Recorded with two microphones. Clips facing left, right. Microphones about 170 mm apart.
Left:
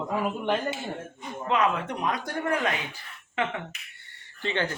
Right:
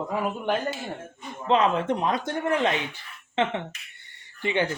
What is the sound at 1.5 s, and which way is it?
Speech, 25° right (ahead or behind).